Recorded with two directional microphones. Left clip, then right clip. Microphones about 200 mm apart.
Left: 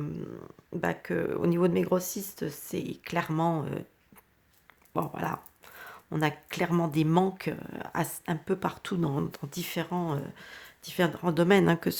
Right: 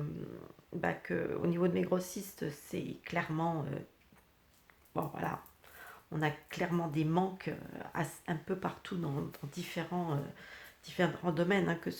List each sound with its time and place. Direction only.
0.8 s speech: 35° left (ahead or behind)
4.9 s speech: 40° left (ahead or behind)